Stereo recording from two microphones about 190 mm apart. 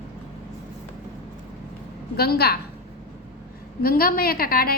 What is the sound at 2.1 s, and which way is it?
Speech, 55° left (ahead or behind).